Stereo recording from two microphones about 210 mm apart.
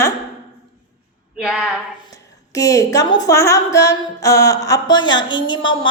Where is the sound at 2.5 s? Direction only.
15° left (ahead or behind).